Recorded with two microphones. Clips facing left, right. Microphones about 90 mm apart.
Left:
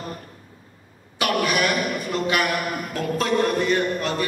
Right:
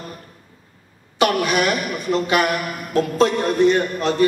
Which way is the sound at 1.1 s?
25° right (ahead or behind).